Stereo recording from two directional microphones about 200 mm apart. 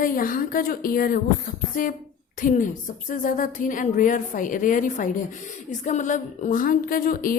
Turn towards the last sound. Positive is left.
turn(degrees=45)  # may be behind; listen again after turning